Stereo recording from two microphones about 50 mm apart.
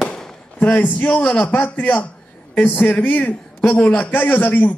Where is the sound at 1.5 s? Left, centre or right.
Left.